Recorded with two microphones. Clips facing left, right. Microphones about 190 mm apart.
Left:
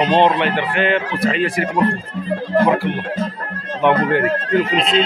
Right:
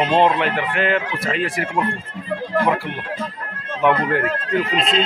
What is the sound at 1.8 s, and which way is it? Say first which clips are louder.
Speech: left 6 dB; 35° left (ahead or behind).